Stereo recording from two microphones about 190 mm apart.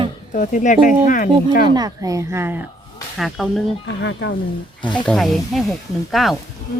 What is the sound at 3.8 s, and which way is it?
Speech, 65° left (ahead or behind).